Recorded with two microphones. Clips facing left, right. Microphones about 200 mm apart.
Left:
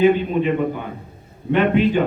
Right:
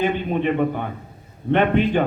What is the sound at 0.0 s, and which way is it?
A man's voice, 50° right (ahead or behind).